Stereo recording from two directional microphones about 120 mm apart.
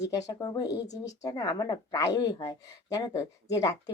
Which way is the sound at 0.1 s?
30° left (ahead or behind).